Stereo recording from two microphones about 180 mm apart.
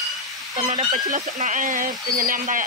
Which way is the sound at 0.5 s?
35° right (ahead or behind).